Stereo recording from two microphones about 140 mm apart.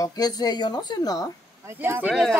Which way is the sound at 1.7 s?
15° right (ahead or behind).